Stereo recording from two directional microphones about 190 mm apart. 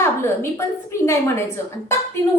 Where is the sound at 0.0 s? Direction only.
15° left (ahead or behind).